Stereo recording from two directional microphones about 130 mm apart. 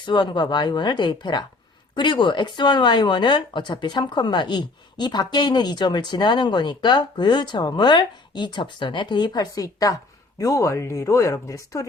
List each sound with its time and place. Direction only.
0.0 s speech: 35° left (ahead or behind)